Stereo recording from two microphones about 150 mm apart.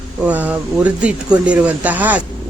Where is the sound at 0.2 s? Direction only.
10° right (ahead or behind).